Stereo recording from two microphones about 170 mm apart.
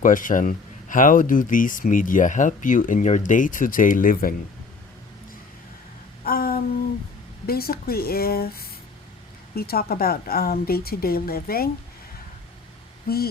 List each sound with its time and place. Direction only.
0.0 s speech: 50° left (ahead or behind)
6.2 s a sound: 60° left (ahead or behind)
7.4 s a woman's voice: 60° left (ahead or behind)